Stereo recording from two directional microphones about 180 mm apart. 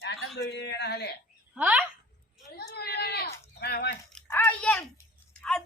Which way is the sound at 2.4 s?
60° left (ahead or behind).